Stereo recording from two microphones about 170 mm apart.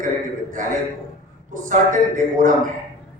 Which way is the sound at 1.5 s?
50° right (ahead or behind).